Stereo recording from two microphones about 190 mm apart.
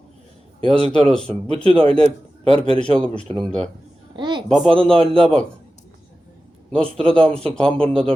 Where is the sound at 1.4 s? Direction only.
30° right (ahead or behind).